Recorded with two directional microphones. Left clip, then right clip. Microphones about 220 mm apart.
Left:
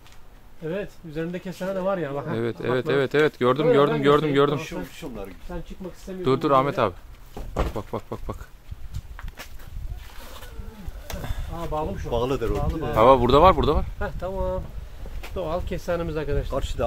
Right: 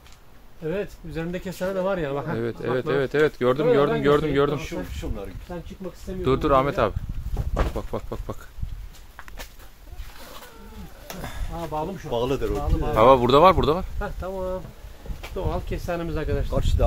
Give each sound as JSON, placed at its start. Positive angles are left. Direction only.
{"t": 0.7, "sound": "speech", "side_deg": -15}
{"t": 2.3, "sound": "speech", "side_deg": 30}
{"t": 4.6, "sound": "speech", "side_deg": 45}
{"t": 5.8, "sound": "speech", "side_deg": 35}
{"t": 6.2, "sound": "speech", "side_deg": 10}
{"t": 11.1, "sound": "a sound", "side_deg": 45}
{"t": 11.7, "sound": "speech", "side_deg": 40}
{"t": 12.1, "sound": "speech", "side_deg": 10}
{"t": 12.9, "sound": "speech", "side_deg": 0}
{"t": 13.9, "sound": "speech", "side_deg": 40}
{"t": 16.4, "sound": "speech", "side_deg": 10}